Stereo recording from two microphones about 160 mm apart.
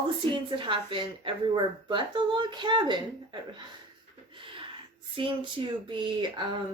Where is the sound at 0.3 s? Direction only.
30° right (ahead or behind).